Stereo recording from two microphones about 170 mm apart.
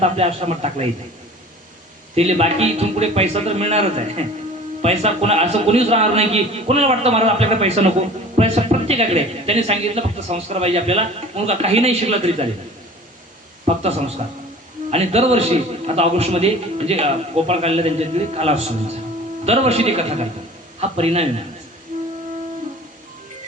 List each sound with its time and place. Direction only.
0.0 s a man's voice: 35° right (ahead or behind)
2.1 s a man's voice: 40° right (ahead or behind)
13.7 s speech: 40° right (ahead or behind)
14.8 s a man's voice: 35° right (ahead or behind)